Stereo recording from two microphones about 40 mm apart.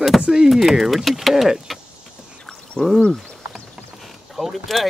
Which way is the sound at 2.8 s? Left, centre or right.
Left.